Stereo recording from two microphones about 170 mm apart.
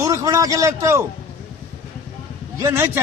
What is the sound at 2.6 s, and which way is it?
Speech, 15° right (ahead or behind).